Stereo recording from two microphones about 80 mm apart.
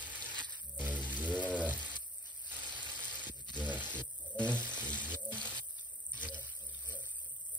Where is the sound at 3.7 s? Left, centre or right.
Right.